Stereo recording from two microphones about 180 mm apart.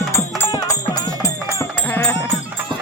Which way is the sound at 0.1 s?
15° left (ahead or behind).